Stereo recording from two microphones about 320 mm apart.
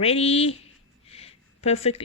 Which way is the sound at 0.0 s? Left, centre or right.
Centre.